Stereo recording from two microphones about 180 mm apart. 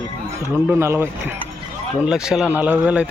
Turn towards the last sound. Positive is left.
turn(degrees=-5)  # may be behind; listen again after turning